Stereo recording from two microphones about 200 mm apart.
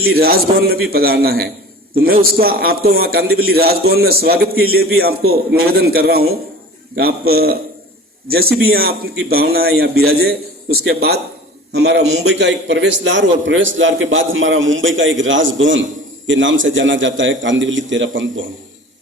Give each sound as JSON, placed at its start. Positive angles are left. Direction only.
{"t": 0.0, "sound": "a man's voice", "side_deg": -50}
{"t": 8.7, "sound": "a man's voice", "side_deg": -50}